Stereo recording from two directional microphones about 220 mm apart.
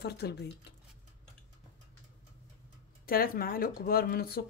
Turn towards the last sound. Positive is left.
turn(degrees=45)  # may be behind; listen again after turning